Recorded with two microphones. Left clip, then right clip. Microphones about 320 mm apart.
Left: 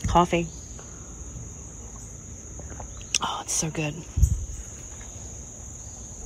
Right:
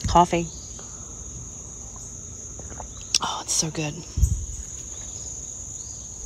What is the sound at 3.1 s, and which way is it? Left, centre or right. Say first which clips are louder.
Whispering: right 3 dB; centre.